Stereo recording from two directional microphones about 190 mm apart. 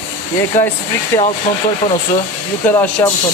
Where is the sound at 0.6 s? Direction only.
45° left (ahead or behind).